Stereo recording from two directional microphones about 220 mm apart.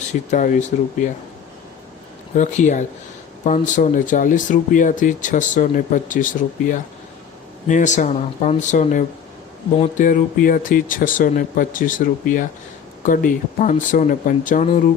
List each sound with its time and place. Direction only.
0.3 s speech: 35° left (ahead or behind)
2.3 s speech: 35° left (ahead or behind)